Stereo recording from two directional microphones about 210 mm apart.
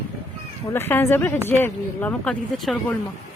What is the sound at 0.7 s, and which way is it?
Speech, 10° left (ahead or behind).